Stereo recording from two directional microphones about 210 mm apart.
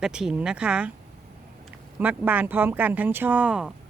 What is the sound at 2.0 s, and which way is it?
Speech, 5° right (ahead or behind).